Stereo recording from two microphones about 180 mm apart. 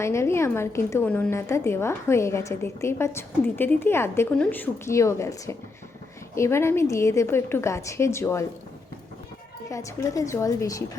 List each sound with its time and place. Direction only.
0.0 s a woman's voice: 15° left (ahead or behind)
9.6 s a woman's voice: 15° left (ahead or behind)